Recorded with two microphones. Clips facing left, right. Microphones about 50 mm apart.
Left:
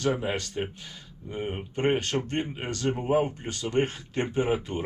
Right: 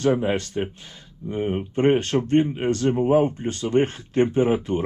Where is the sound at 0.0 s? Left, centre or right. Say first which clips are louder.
Right 6 dB; right.